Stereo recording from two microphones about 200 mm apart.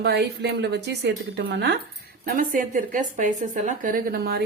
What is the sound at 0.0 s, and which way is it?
Speech, 55° right (ahead or behind).